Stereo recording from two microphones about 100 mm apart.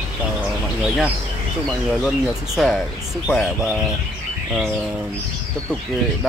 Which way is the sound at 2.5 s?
Centre (ahead or behind).